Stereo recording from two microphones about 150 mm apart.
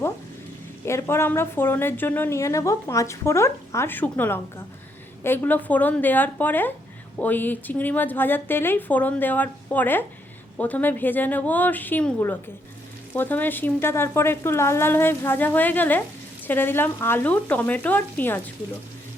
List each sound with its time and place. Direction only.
0.9 s a woman's voice: 15° left (ahead or behind)